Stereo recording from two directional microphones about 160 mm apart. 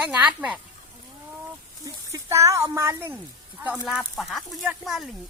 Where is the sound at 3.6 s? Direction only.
5° right (ahead or behind).